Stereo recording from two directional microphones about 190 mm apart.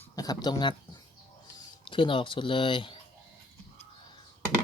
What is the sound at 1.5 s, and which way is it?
Speech, 25° left (ahead or behind).